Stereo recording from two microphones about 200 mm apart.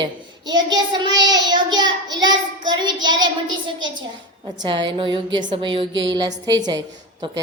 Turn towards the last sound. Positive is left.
turn(degrees=-20)  # may be behind; listen again after turning